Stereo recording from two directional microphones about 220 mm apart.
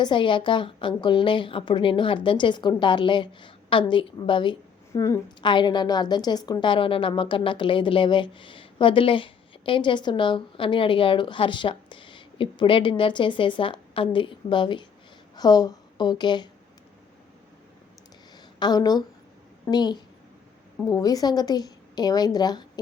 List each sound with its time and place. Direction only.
0.0 s a woman's voice: 20° left (ahead or behind)
18.6 s a woman's voice: 20° left (ahead or behind)